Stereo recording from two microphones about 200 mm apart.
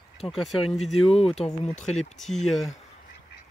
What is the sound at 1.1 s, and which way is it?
Speech, 30° left (ahead or behind).